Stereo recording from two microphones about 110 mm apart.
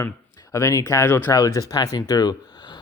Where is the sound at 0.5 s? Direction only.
30° left (ahead or behind).